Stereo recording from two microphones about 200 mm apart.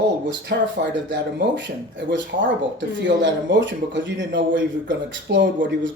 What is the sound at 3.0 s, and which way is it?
A man's voice, 65° right (ahead or behind).